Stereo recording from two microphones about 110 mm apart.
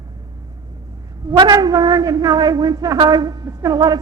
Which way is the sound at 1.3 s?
35° right (ahead or behind).